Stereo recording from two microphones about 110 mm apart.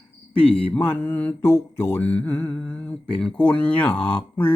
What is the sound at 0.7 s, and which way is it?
Mantra, 15° left (ahead or behind).